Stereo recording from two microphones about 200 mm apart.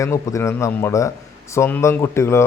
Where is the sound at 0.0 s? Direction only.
15° left (ahead or behind).